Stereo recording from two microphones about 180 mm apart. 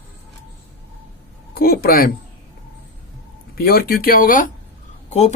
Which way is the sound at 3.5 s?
55° left (ahead or behind).